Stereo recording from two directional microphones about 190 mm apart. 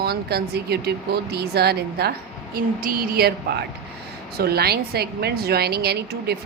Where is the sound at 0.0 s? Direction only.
55° right (ahead or behind).